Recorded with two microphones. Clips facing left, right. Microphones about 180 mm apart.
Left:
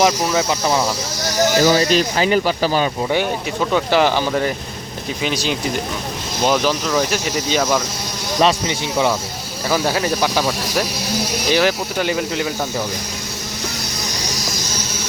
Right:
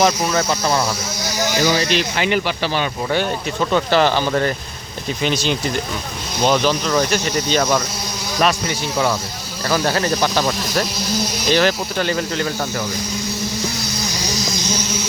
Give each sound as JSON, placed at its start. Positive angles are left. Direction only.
{"t": 0.2, "sound": "speech", "side_deg": 0}
{"t": 0.6, "sound": "speech", "side_deg": 15}
{"t": 1.5, "sound": "speech", "side_deg": 45}
{"t": 3.6, "sound": "speech", "side_deg": 5}
{"t": 8.4, "sound": "speech", "side_deg": 25}
{"t": 9.6, "sound": "speech", "side_deg": 10}